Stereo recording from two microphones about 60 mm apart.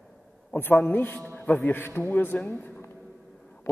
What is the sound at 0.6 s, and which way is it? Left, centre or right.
A man's voice, left.